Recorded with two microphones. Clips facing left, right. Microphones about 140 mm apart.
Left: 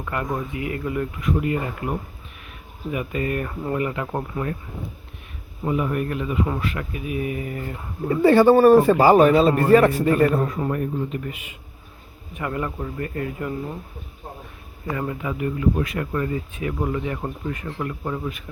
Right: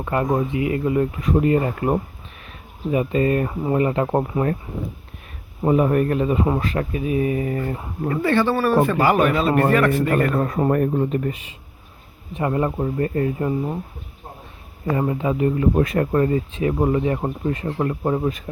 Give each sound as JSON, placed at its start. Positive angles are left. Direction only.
{"t": 0.0, "sound": "speech", "side_deg": -30}
{"t": 2.9, "sound": "speech", "side_deg": -30}
{"t": 3.5, "sound": "speech", "side_deg": -15}
{"t": 3.8, "sound": "speech", "side_deg": -30}
{"t": 5.6, "sound": "speech", "side_deg": -40}
{"t": 8.2, "sound": "a man's voice", "side_deg": 35}
{"t": 10.1, "sound": "speech", "side_deg": -65}
{"t": 10.6, "sound": "speech", "side_deg": -50}
{"t": 12.3, "sound": "speech", "side_deg": -30}
{"t": 14.9, "sound": "speech", "side_deg": -30}